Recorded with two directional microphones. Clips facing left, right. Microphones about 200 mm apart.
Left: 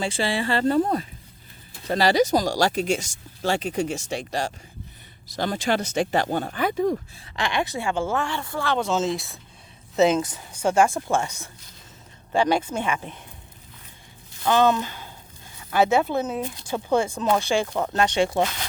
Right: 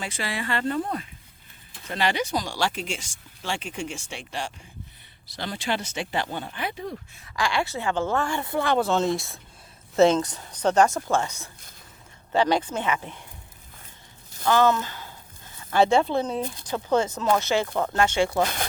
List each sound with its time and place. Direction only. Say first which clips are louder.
0.0 s speech: left 6 dB; 30° left (ahead or behind); by 7.0 s 45° left (ahead or behind)
7.2 s speech: even; 25° left (ahead or behind)
8.2 s speech: right 2 dB; 15° right (ahead or behind)
8.8 s speech: right 1 dB; centre (ahead or behind)
14.4 s speech: left 1 dB; 20° left (ahead or behind)
15.7 s speech: even; 5° left (ahead or behind)